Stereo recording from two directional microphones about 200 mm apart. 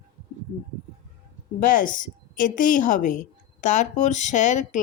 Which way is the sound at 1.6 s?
40° left (ahead or behind).